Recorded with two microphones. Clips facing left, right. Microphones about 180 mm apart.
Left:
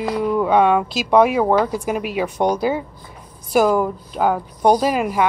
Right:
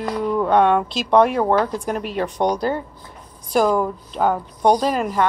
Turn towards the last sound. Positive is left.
turn(degrees=10)  # may be behind; listen again after turning